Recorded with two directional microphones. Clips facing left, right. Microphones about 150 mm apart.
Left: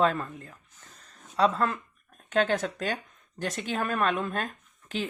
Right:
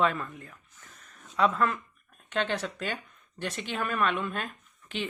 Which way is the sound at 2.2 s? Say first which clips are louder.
Left 5 dB; 45° left (ahead or behind).